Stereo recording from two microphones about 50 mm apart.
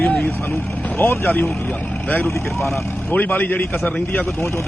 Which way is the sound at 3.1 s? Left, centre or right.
Left.